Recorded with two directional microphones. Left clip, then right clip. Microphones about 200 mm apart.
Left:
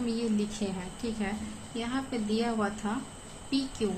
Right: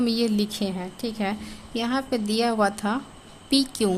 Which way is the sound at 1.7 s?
60° right (ahead or behind).